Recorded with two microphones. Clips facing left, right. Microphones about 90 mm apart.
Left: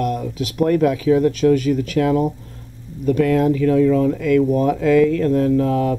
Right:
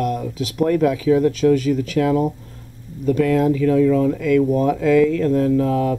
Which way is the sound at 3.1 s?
35° left (ahead or behind).